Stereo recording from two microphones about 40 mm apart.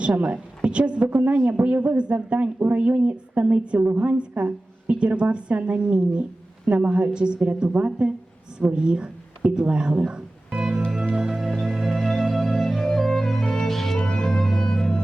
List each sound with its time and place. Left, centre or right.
0.2 s a woman's voice: right
3.8 s a woman's voice: right
4.0 s a woman's voice: right; by 10.2 s centre
10.6 s music: right
11.2 s music: centre
14.0 s music: left